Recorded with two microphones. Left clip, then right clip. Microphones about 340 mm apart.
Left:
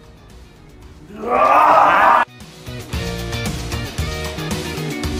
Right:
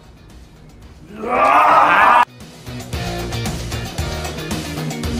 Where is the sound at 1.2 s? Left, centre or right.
Centre.